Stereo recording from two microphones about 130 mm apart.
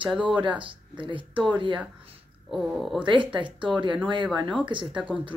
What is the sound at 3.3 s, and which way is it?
Speech, 40° right (ahead or behind).